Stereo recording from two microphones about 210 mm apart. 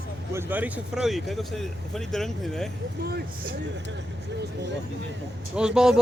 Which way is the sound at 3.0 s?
45° right (ahead or behind).